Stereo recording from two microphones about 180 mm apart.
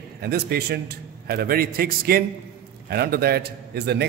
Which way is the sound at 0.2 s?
60° right (ahead or behind).